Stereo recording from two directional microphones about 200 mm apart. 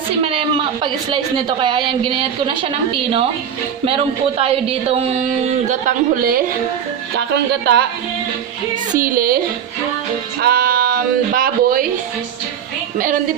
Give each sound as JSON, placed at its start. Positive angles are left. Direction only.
{"t": 0.3, "sound": "a woman's voice", "side_deg": -25}
{"t": 9.0, "sound": "speech", "side_deg": -45}
{"t": 10.4, "sound": "speech", "side_deg": -50}